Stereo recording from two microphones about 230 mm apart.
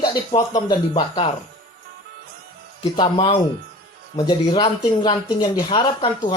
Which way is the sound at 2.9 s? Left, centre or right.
Left.